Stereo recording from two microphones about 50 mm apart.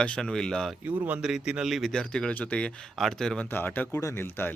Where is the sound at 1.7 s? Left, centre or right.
Centre.